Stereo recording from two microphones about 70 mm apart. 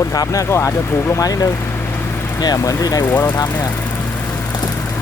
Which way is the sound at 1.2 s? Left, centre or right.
Left.